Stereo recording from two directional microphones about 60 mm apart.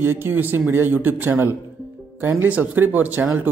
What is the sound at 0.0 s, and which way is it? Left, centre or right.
Speech, right.